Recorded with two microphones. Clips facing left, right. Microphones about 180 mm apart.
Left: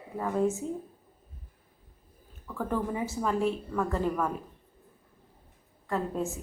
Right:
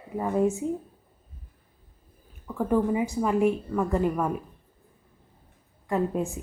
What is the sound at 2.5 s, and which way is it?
A woman's voice, 15° right (ahead or behind).